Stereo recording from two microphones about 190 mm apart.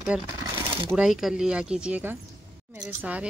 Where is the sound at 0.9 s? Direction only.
5° right (ahead or behind).